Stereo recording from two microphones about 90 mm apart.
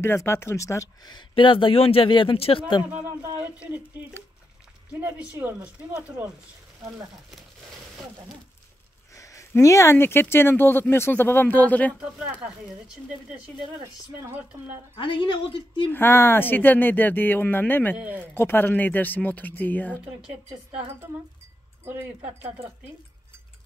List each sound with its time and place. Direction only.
0.0 s speech: 30° left (ahead or behind)
1.3 s speech: 70° left (ahead or behind); by 2.6 s 90° left
3.3 s speech: 20° right (ahead or behind)
5.2 s speech: 25° right (ahead or behind)
9.1 s speech: 35° left (ahead or behind); by 11.9 s 15° left (ahead or behind)
12.0 s speech: 10° right (ahead or behind)
14.2 s speech: 25° right (ahead or behind)
15.0 s a woman's voice: 65° left (ahead or behind)
15.9 s speech: 25° left (ahead or behind)
17.9 s speech: 15° right (ahead or behind)
18.2 s speech: 25° left (ahead or behind)
21.8 s speech: 25° right (ahead or behind)